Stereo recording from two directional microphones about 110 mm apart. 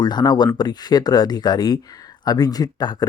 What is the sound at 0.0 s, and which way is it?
Speech, 40° left (ahead or behind).